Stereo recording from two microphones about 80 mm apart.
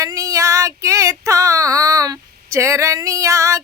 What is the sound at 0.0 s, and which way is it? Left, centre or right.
Female singing, right.